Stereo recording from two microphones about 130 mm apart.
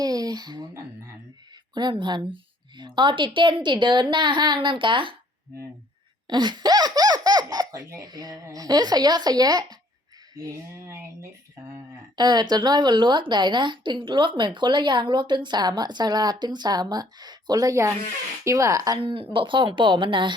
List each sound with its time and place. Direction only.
0.0 s speech: 30° right (ahead or behind)
1.7 s a woman's voice: 35° right (ahead or behind)
6.2 s a woman's voice: 35° right (ahead or behind)
12.1 s a woman's voice: 35° right (ahead or behind)
19.0 s a woman's voice: 40° right (ahead or behind)